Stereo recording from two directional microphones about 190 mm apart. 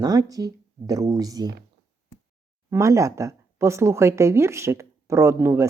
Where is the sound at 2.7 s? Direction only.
15° right (ahead or behind).